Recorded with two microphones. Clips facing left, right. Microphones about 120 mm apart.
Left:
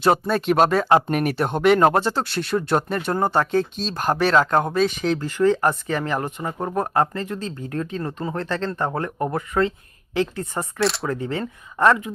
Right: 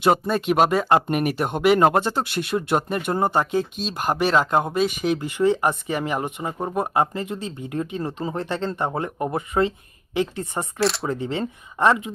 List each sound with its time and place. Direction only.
0.1 s speech: centre (ahead or behind)
2.0 s speech: 15° right (ahead or behind)
10.8 s speech: centre (ahead or behind)
11.0 s speech: 20° right (ahead or behind)